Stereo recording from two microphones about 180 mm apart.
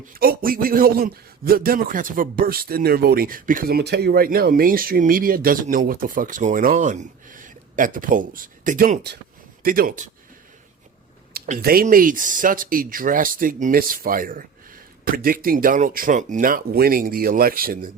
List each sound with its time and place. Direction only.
0.1 s a man's voice: 55° right (ahead or behind)
11.3 s a man's voice: 50° right (ahead or behind)